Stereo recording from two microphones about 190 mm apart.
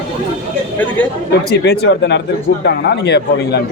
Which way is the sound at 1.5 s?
65° left (ahead or behind).